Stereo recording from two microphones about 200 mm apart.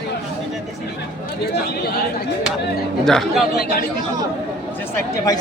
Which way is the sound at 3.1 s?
Centre (ahead or behind).